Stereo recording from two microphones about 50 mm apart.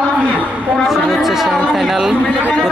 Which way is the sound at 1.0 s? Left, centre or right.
Centre.